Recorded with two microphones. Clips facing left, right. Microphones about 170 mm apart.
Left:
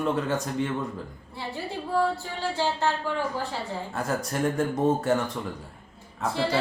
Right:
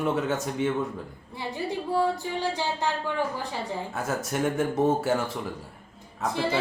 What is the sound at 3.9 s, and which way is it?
Speech, 5° right (ahead or behind).